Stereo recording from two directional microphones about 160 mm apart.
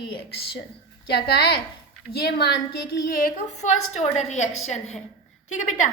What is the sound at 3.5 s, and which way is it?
A woman's voice, 45° left (ahead or behind).